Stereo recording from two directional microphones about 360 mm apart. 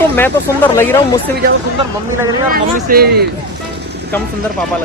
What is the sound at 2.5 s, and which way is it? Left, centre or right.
Speech, right.